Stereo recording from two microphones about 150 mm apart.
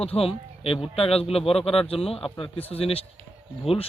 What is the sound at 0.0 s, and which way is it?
A man's voice, 40° left (ahead or behind).